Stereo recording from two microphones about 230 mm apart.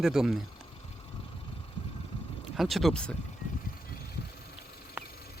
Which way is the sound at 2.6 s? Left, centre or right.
Centre.